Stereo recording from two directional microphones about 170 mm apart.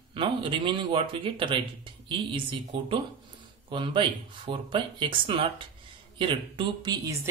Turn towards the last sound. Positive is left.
turn(degrees=-20)  # may be behind; listen again after turning